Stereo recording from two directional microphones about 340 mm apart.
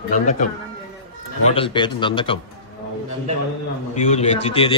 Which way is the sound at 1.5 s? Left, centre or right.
Centre.